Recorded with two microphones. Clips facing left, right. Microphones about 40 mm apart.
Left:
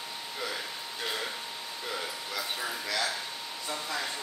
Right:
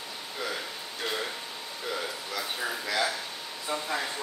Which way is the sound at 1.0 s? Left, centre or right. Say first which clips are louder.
Right 2 dB; centre.